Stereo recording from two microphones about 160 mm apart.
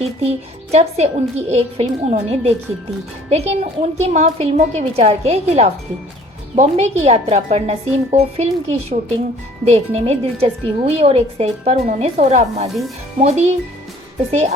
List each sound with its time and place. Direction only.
0.2 s a woman's voice: 40° right (ahead or behind)